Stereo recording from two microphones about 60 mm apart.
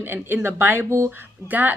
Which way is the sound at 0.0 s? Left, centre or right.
Right.